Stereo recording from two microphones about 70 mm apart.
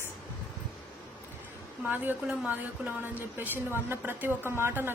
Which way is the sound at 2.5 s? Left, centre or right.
Right.